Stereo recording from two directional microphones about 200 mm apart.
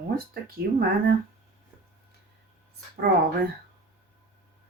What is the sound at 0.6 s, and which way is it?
Speech, 50° right (ahead or behind).